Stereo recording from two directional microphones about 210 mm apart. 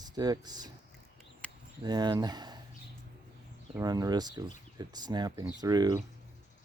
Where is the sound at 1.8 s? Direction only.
20° right (ahead or behind).